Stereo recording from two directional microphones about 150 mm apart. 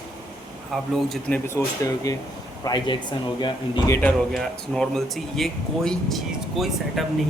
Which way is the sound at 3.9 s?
10° left (ahead or behind).